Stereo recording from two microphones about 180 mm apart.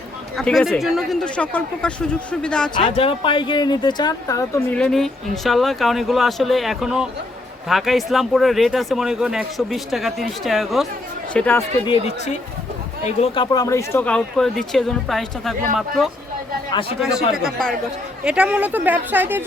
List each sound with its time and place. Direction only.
0.3 s speech: centre (ahead or behind)
2.7 s speech: 30° left (ahead or behind)
4.7 s speech: 5° left (ahead or behind)
11.9 s speech: 40° left (ahead or behind); by 15.5 s centre (ahead or behind)
17.0 s speech: centre (ahead or behind)